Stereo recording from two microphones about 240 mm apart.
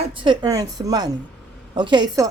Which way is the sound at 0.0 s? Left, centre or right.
Right.